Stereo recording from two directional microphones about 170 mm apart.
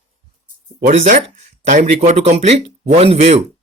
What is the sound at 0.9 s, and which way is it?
Speech, 45° right (ahead or behind).